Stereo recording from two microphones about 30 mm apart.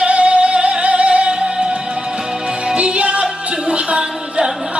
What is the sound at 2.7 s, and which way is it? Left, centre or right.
Music, right.